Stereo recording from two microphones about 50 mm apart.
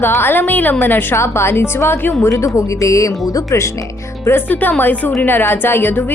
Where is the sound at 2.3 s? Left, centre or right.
Left.